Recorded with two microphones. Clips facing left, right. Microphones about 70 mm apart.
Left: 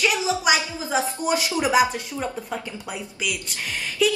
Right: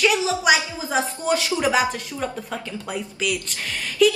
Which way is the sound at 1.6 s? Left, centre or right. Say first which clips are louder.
Left 1 dB; centre.